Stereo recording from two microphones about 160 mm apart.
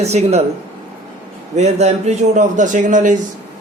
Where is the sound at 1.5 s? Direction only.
45° right (ahead or behind).